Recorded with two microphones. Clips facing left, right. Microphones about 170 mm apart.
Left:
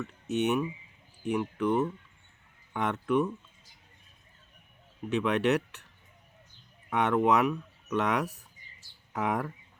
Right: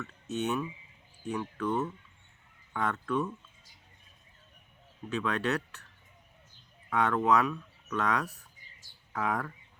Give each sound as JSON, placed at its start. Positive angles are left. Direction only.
{"t": 0.0, "sound": "speech", "side_deg": 15}
{"t": 5.0, "sound": "speech", "side_deg": 20}
{"t": 6.9, "sound": "speech", "side_deg": 20}